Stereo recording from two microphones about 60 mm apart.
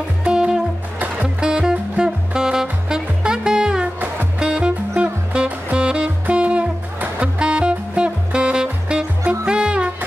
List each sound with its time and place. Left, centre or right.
0.2 s music: centre